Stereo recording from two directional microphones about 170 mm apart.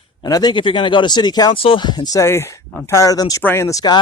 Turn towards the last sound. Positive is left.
turn(degrees=20)  # may be behind; listen again after turning